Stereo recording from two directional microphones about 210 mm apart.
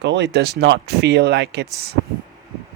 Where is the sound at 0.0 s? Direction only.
55° right (ahead or behind).